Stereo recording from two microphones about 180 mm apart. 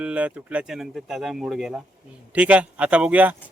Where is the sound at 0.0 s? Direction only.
5° right (ahead or behind).